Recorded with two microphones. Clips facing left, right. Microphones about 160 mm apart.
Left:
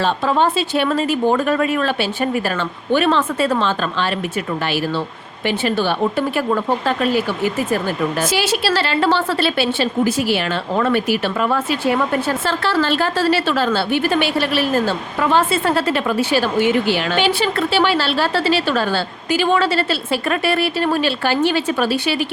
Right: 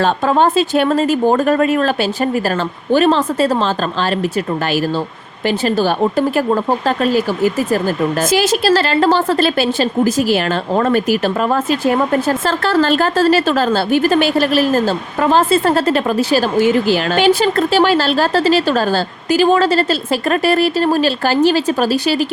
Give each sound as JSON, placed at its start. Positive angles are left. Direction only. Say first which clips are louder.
{"t": 0.0, "sound": "a woman's voice", "louder": "right 3 dB", "side_deg": -45}
{"t": 5.5, "sound": "a woman's voice", "louder": "right 3 dB", "side_deg": -40}
{"t": 8.3, "sound": "a woman's voice", "louder": "right 5 dB", "side_deg": -45}